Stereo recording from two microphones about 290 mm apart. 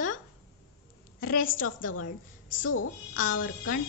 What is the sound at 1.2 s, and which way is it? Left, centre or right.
Speech, left.